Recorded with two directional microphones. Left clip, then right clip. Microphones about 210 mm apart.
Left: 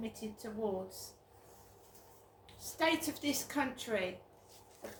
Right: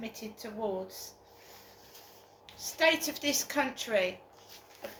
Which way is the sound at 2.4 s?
20° left (ahead or behind).